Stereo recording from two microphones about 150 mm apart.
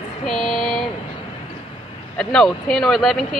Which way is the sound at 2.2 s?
5° left (ahead or behind).